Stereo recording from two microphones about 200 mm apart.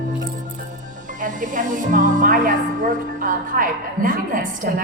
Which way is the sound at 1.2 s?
40° right (ahead or behind).